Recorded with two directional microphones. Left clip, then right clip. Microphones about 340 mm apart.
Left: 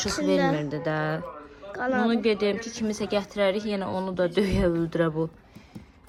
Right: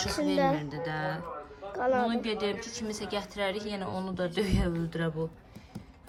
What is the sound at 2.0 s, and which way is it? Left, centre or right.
Speech, centre.